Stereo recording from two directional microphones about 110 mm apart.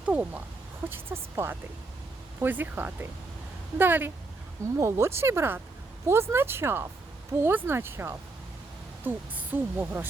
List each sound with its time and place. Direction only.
0.0 s speech: 15° right (ahead or behind)